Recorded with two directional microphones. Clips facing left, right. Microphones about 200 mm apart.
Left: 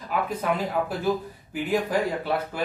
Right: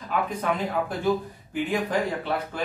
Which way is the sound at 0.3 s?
5° left (ahead or behind).